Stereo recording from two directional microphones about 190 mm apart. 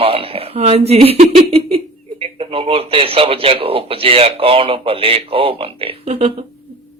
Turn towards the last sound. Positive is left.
turn(degrees=-30)  # may be behind; listen again after turning